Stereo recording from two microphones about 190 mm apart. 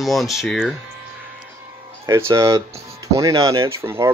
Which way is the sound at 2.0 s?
15° right (ahead or behind).